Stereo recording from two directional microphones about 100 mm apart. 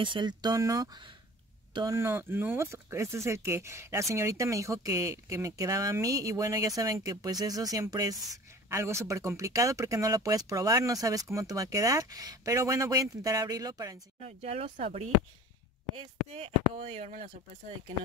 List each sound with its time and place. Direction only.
0.0 s speech: 50° right (ahead or behind)
2.0 s speech: 25° right (ahead or behind)
14.4 s speech: 90° right
16.0 s speech: 80° right